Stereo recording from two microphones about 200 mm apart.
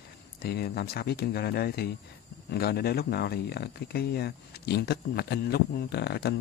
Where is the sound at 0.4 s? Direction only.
50° left (ahead or behind).